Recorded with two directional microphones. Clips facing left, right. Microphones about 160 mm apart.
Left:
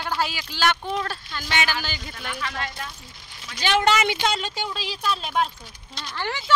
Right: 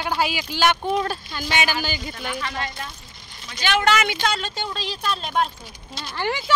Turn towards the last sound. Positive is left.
turn(degrees=-15)  # may be behind; listen again after turning